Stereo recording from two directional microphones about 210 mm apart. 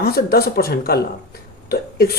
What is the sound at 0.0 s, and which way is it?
Speech, 45° left (ahead or behind).